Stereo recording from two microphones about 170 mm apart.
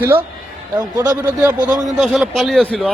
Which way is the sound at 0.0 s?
15° right (ahead or behind).